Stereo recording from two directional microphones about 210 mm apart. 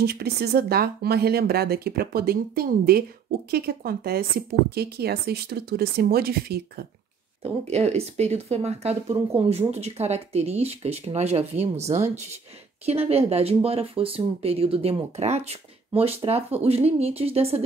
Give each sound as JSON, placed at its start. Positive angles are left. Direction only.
{"t": 0.0, "sound": "speech", "side_deg": -50}
{"t": 7.4, "sound": "speech", "side_deg": -30}